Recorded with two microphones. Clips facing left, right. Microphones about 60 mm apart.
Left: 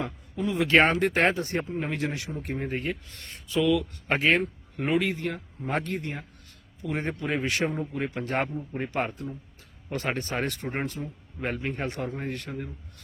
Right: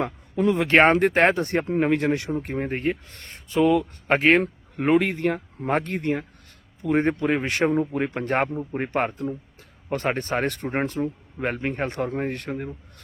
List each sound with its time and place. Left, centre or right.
0.0 s speech: right